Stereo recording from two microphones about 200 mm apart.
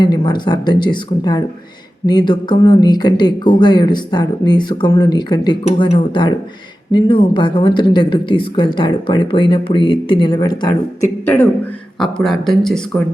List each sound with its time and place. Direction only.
0.0 s speech: 20° left (ahead or behind)
11.9 s speech: centre (ahead or behind)